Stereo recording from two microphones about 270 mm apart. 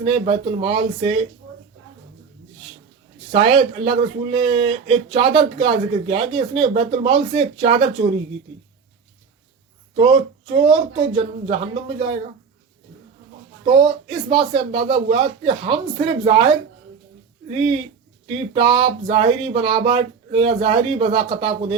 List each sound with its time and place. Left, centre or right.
0.0 s speech: right
3.3 s speech: centre
9.9 s speech: right
13.7 s speech: centre